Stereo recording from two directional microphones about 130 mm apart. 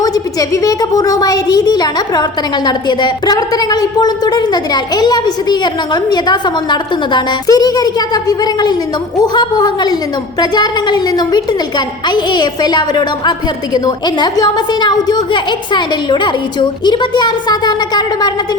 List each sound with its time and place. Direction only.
0.0 s a child's voice: 25° left (ahead or behind)